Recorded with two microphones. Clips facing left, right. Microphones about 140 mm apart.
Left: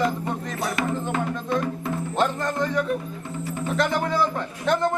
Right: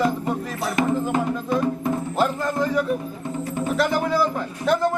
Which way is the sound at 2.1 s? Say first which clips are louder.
Even; 5° right (ahead or behind).